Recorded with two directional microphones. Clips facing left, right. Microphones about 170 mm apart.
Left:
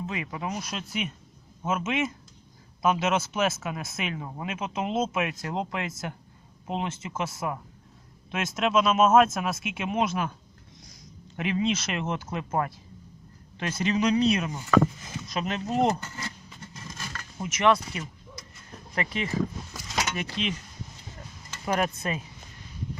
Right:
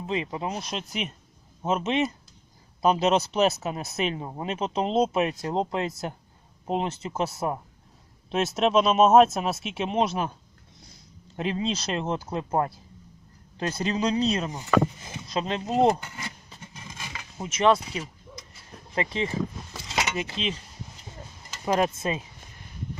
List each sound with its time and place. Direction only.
0.1 s speech: 25° right (ahead or behind)
11.3 s speech: 30° right (ahead or behind)
15.9 s speech: 10° right (ahead or behind)
16.7 s a sound: 10° right (ahead or behind)
17.4 s speech: 25° right (ahead or behind)
21.2 s a sound: 25° right (ahead or behind)